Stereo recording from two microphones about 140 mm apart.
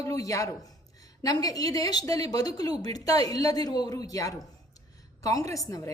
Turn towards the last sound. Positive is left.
turn(degrees=25)  # may be behind; listen again after turning